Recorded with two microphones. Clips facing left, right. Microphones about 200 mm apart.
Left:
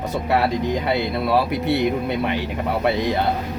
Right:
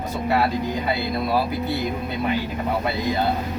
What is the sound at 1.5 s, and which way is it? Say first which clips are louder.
Speech: left 5 dB; 75° left (ahead or behind).